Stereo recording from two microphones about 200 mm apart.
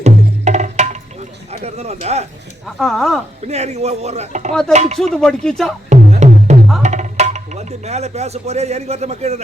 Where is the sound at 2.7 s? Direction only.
Centre (ahead or behind).